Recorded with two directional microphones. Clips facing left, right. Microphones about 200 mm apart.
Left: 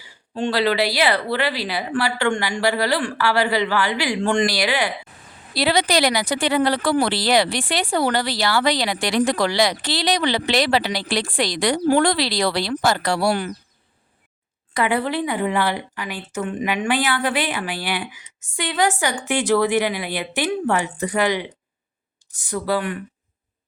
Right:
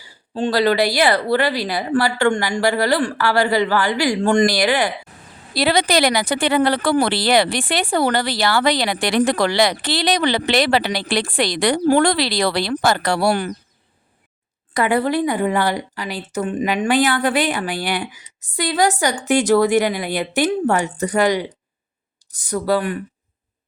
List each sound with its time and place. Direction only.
0.0 s a woman's voice: 35° right (ahead or behind); by 13.5 s 55° right (ahead or behind)
14.7 s a woman's voice: 45° right (ahead or behind)